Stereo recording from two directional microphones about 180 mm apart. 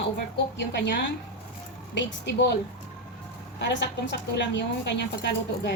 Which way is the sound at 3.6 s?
80° left.